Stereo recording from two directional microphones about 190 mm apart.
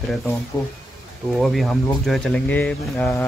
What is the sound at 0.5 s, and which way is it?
Speech, 10° left (ahead or behind).